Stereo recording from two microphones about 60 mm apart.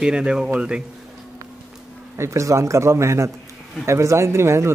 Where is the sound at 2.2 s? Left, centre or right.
Right.